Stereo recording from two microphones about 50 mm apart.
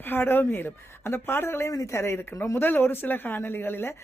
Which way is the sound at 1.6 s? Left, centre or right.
Left.